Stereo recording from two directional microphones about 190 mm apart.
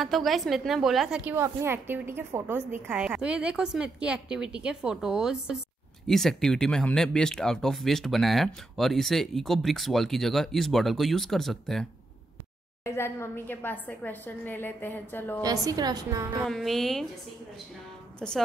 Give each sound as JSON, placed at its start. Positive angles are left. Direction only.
{"t": 0.0, "sound": "speech", "side_deg": 0}
{"t": 12.8, "sound": "a woman's voice", "side_deg": 15}
{"t": 15.4, "sound": "a woman's voice", "side_deg": -20}
{"t": 16.4, "sound": "speech", "side_deg": 0}
{"t": 18.2, "sound": "speech", "side_deg": 0}